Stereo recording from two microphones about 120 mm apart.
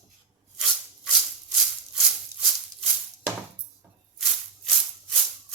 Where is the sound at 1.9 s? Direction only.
5° right (ahead or behind).